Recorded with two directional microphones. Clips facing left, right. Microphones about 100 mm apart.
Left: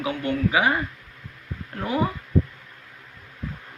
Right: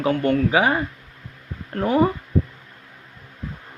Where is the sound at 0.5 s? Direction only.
30° right (ahead or behind).